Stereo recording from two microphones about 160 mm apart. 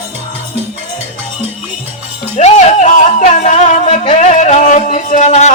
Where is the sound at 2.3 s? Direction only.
45° left (ahead or behind).